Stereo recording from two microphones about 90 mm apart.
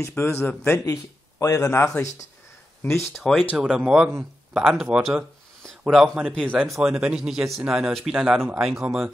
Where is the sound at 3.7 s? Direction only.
10° right (ahead or behind).